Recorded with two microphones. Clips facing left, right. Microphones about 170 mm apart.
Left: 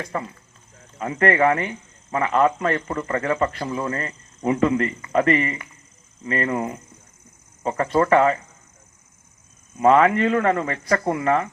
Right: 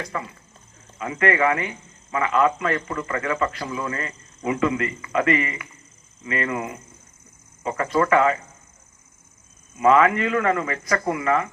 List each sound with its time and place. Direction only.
0.1 s speech: 40° left (ahead or behind)
9.8 s speech: 35° left (ahead or behind)